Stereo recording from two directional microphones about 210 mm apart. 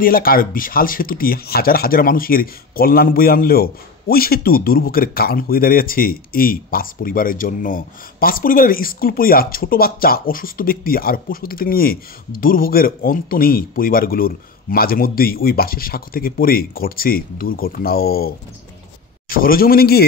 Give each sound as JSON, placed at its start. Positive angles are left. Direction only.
{"t": 0.0, "sound": "speech", "side_deg": 45}